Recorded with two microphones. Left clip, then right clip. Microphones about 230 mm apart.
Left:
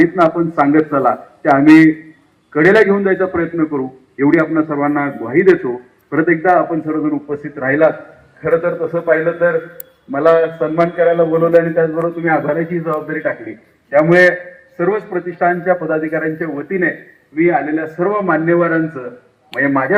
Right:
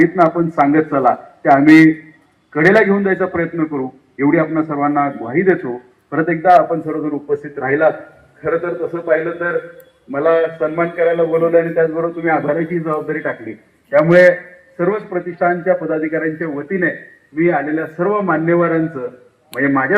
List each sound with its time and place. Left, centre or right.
0.0 s a man's voice: left; by 6.6 s centre
6.8 s a man's voice: right
15.4 s a man's voice: centre
16.4 s a man's voice: right
19.5 s a man's voice: right